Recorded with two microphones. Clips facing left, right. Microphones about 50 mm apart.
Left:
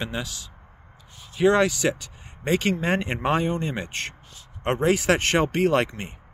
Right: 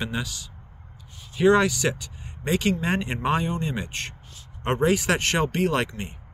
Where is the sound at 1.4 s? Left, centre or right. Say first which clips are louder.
Even; centre.